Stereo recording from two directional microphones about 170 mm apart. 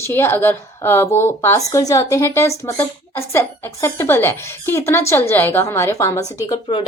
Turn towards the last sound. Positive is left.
turn(degrees=20)  # may be behind; listen again after turning